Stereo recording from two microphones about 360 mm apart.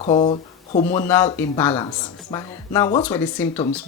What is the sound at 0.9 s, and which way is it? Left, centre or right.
Speech, centre.